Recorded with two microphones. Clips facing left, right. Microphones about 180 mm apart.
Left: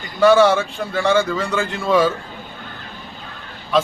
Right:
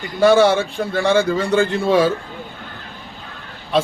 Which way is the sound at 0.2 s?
35° right (ahead or behind).